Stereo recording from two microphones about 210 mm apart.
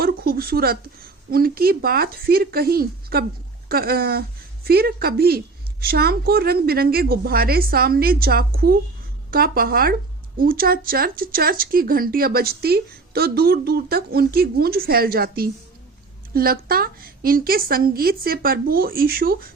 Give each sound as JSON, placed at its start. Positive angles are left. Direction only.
{"t": 0.0, "sound": "a woman's voice", "side_deg": -45}